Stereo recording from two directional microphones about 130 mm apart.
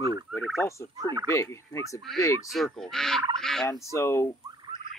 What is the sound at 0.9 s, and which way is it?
Fowl, 30° right (ahead or behind).